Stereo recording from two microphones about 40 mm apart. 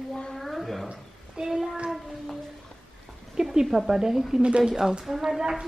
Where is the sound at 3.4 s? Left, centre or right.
Centre.